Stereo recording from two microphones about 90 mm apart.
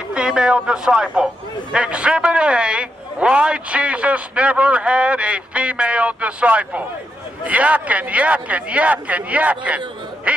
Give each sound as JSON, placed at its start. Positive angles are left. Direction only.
{"t": 0.1, "sound": "speech", "side_deg": -10}